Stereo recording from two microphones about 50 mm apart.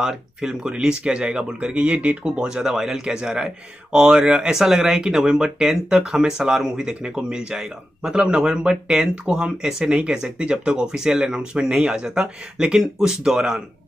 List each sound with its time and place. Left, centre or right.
0.0 s speech: centre; by 2.1 s right
2.2 s a man's voice: centre